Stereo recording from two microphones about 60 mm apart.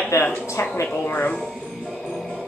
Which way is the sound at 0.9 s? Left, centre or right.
Left.